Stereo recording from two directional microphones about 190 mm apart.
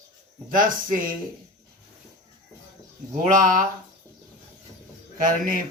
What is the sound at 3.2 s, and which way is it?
Speech, 45° right (ahead or behind).